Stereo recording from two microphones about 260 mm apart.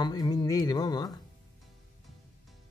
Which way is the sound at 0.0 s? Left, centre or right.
Centre.